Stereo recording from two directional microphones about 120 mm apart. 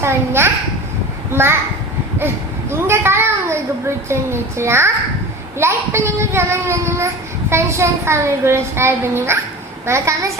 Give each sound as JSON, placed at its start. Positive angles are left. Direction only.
{"t": 0.0, "sound": "a child's voice", "side_deg": -20}